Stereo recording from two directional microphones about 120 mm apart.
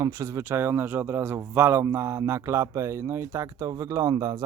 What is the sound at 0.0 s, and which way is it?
A man's voice, 30° right (ahead or behind).